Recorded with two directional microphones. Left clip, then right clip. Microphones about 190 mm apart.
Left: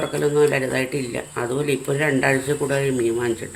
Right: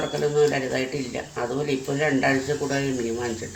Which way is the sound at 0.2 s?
35° left (ahead or behind).